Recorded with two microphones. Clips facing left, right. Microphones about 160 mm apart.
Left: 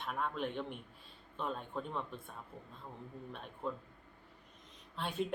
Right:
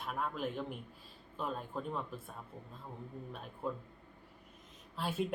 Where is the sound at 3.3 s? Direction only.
5° right (ahead or behind).